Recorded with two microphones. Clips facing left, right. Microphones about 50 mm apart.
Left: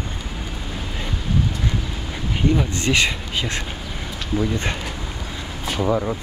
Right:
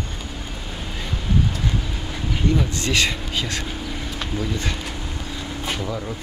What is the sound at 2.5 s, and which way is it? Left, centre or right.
Speech, left.